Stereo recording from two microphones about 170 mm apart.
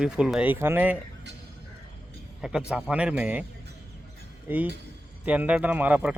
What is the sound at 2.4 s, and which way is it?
Speech, 5° right (ahead or behind).